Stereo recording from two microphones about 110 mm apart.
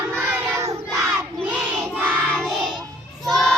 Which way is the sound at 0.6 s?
30° right (ahead or behind).